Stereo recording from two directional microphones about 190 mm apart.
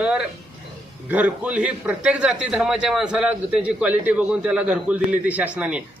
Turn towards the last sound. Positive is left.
turn(degrees=-5)  # may be behind; listen again after turning